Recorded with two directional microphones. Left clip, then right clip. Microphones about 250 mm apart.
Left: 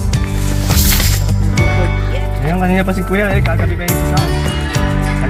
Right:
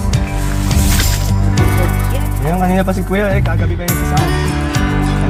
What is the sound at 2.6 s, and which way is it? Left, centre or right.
Speech, centre.